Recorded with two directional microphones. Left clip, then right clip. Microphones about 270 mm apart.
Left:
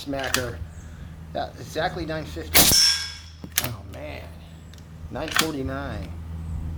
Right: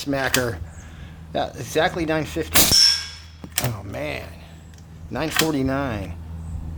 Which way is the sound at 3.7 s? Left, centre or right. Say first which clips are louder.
Right 8 dB; right.